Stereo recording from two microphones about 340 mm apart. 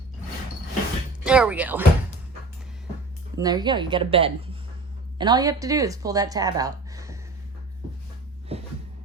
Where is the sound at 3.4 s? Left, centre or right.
Centre.